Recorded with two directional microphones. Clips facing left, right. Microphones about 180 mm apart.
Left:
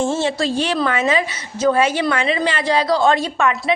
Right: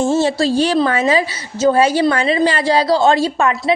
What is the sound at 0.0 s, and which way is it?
A woman's voice, 40° right (ahead or behind).